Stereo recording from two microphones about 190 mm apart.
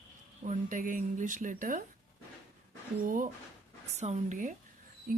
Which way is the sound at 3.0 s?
45° right (ahead or behind).